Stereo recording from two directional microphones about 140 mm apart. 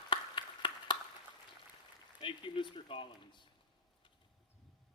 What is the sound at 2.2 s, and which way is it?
Speech, 35° left (ahead or behind).